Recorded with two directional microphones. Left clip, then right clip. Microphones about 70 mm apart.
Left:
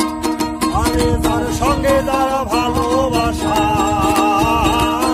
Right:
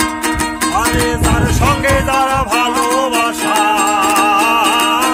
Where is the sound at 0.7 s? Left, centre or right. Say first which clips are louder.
Right 3 dB; right.